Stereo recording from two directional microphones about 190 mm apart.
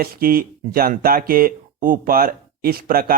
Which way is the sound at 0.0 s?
50° right (ahead or behind).